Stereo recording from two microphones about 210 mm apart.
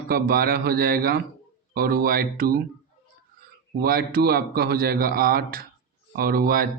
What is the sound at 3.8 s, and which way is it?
A man's voice, 45° right (ahead or behind).